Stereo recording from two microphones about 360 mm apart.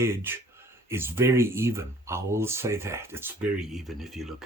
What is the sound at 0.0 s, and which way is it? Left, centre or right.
Speech, centre.